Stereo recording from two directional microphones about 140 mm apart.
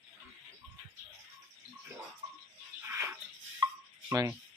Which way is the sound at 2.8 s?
15° right (ahead or behind).